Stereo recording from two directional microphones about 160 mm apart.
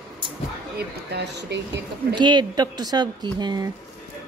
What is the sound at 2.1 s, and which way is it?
Speech, 30° right (ahead or behind).